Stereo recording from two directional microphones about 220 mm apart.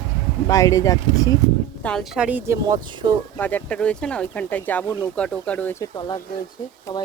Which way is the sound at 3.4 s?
5° left (ahead or behind).